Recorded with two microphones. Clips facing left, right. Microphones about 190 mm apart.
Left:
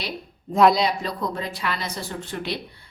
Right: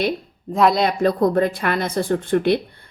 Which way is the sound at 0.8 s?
50° right (ahead or behind).